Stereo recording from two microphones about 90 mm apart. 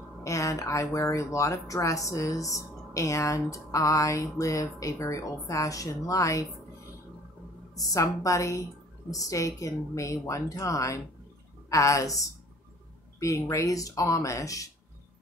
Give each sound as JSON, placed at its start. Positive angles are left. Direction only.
{"t": 0.2, "sound": "speech", "side_deg": 35}
{"t": 7.7, "sound": "speech", "side_deg": 40}